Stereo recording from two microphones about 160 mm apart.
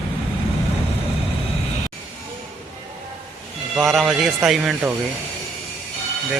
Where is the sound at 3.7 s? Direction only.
Centre (ahead or behind).